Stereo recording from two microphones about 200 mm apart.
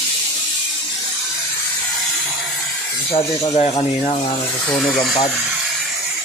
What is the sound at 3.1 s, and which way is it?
Speech, 30° left (ahead or behind).